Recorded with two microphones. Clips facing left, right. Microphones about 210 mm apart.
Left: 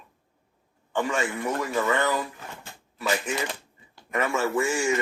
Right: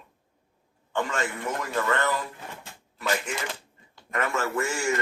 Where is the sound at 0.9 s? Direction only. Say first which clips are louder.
Left 2 dB; 10° left (ahead or behind).